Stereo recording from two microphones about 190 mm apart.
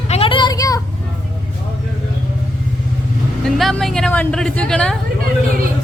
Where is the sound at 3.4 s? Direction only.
5° left (ahead or behind).